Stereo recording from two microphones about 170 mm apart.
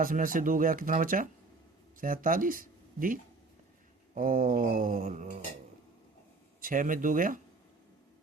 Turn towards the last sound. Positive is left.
turn(degrees=-50)  # may be behind; listen again after turning